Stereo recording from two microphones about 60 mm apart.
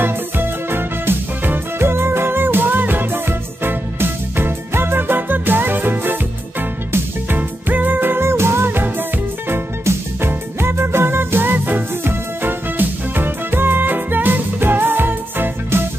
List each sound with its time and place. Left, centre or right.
0.0 s music: right